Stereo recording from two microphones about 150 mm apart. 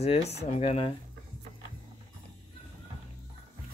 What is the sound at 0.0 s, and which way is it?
Speech, 45° left (ahead or behind).